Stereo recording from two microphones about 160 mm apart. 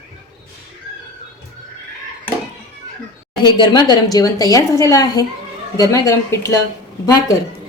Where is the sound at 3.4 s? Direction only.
25° left (ahead or behind).